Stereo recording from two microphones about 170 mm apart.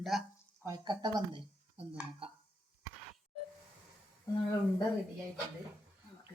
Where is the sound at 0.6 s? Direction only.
20° right (ahead or behind).